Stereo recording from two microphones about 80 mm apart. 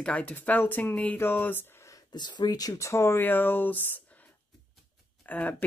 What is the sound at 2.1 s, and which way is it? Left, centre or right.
Speech, left.